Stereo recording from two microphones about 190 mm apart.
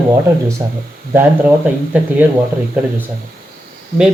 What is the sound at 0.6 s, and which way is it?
Speech, 15° right (ahead or behind).